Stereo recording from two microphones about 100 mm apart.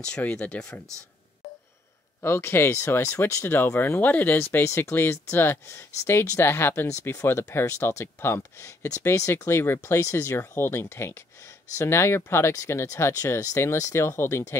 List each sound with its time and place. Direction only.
0.0 s speech: 10° left (ahead or behind)
2.2 s speech: 25° left (ahead or behind)